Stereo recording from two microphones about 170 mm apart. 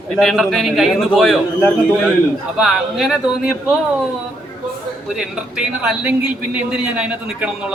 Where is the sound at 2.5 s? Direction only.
Centre (ahead or behind).